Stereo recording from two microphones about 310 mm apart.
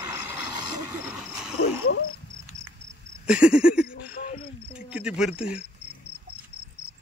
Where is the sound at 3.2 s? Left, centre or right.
Centre.